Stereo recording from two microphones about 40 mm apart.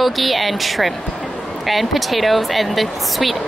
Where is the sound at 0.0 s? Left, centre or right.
Centre.